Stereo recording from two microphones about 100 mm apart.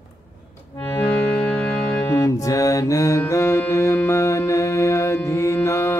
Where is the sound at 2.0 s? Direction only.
30° left (ahead or behind).